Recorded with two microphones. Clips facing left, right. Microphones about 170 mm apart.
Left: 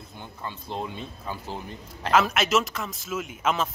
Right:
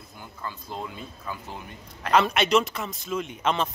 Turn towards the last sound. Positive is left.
turn(degrees=5)  # may be behind; listen again after turning